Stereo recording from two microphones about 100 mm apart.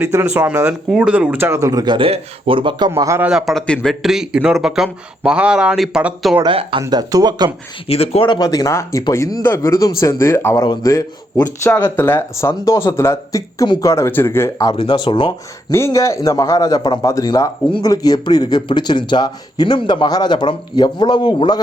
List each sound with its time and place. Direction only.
0.0 s speech: 25° right (ahead or behind)
0.9 s speech: 10° right (ahead or behind); by 1.8 s 30° right (ahead or behind)
1.8 s speech: 50° right (ahead or behind)
2.0 s speech: 70° right (ahead or behind); by 2.9 s 50° right (ahead or behind)
2.9 s speech: 30° right (ahead or behind)
3.2 s speech: 5° right (ahead or behind)
3.5 s speech: 5° left (ahead or behind)
6.5 s speech: 65° right (ahead or behind)
6.9 s speech: 40° right (ahead or behind)
7.9 s a man's voice: 80° left
8.3 s speech: 40° left (ahead or behind)
11.7 s speech: 20° left (ahead or behind)
14.9 s speech: 50° left (ahead or behind)
15.7 s speech: 30° left (ahead or behind); by 21.6 s 45° left (ahead or behind)